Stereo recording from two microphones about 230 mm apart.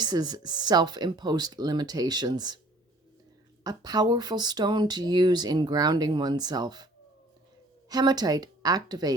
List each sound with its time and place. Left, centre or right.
0.0 s speech: centre
3.6 s speech: centre
7.9 s speech: centre